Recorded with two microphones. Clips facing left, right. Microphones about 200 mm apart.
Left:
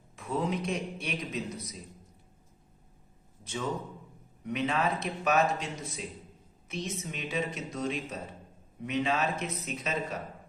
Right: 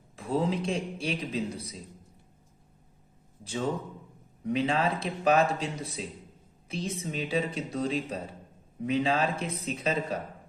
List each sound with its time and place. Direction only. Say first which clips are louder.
0.2 s a man's voice: right 3 dB; 30° right (ahead or behind)
3.4 s a man's voice: right 3 dB; 30° right (ahead or behind)